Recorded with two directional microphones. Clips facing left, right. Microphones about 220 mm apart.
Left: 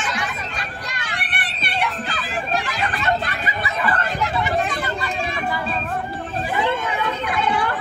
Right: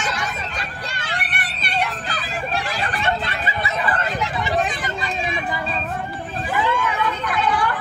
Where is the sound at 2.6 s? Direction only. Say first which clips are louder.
Even; 30° right (ahead or behind).